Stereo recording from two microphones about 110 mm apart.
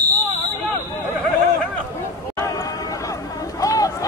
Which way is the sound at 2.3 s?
30° left (ahead or behind).